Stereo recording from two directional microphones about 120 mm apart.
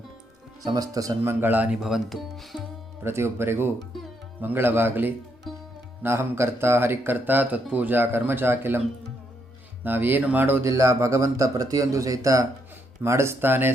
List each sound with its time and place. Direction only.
0.6 s speech: 30° right (ahead or behind); by 2.6 s centre (ahead or behind)
3.0 s speech: 20° right (ahead or behind)
5.5 s sitar: centre (ahead or behind)
6.0 s speech: 20° right (ahead or behind)
9.8 s speech: 15° right (ahead or behind)